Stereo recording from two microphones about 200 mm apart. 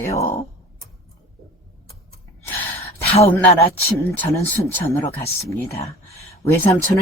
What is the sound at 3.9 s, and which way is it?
Speech, 15° left (ahead or behind).